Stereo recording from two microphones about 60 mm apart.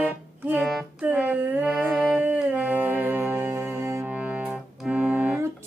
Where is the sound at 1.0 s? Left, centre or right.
Right.